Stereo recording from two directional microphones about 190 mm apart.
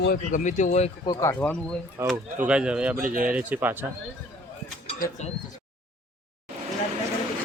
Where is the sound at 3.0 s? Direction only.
45° right (ahead or behind).